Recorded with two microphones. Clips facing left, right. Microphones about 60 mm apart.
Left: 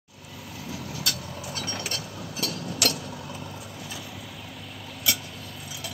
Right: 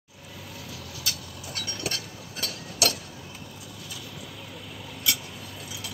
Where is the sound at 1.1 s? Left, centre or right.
Left.